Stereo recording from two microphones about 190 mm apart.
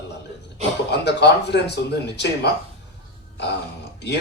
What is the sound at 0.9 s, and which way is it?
Speech, 60° left (ahead or behind).